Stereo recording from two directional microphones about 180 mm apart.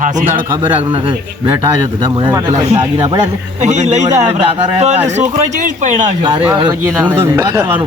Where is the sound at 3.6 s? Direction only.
40° right (ahead or behind).